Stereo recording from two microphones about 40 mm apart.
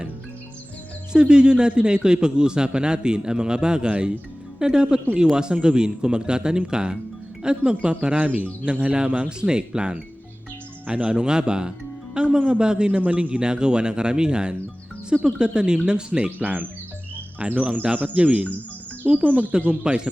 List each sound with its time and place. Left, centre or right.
1.1 s a man's voice: right
16.4 s speech: right
17.4 s a man's voice: right
17.9 s speech: right
19.9 s a man's voice: centre